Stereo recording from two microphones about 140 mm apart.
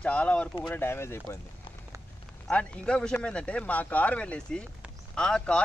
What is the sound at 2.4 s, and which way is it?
Speech, 5° left (ahead or behind).